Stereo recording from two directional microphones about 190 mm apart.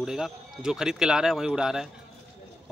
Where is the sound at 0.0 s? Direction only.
Centre (ahead or behind).